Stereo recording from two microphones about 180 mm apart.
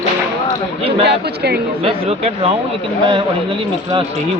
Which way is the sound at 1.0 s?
65° right (ahead or behind).